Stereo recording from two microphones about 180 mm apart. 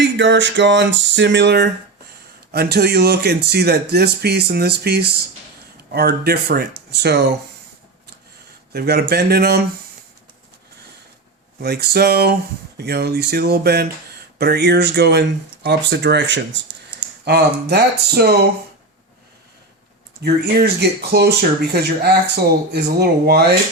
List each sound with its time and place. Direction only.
0.2 s speech: 80° right
2.5 s speech: 60° right (ahead or behind)
8.7 s speech: 60° right (ahead or behind)
11.6 s speech: 60° right (ahead or behind); by 16.4 s 80° right
17.2 s speech: 65° right (ahead or behind)
20.2 s speech: 60° right (ahead or behind)